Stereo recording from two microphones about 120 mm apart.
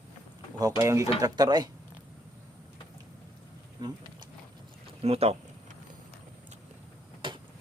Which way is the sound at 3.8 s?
35° right (ahead or behind).